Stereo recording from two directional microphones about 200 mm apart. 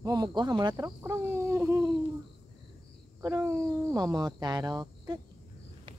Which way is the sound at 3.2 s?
15° right (ahead or behind).